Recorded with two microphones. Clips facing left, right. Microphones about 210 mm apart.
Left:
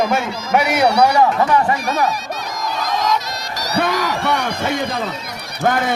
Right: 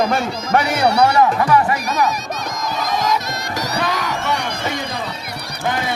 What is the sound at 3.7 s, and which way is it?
Speech, 55° left (ahead or behind).